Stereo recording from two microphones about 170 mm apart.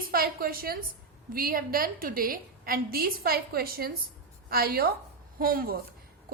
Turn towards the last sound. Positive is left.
turn(degrees=-60)  # may be behind; listen again after turning